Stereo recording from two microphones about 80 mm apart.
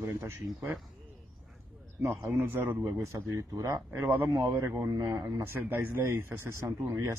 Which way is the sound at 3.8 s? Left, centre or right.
Right.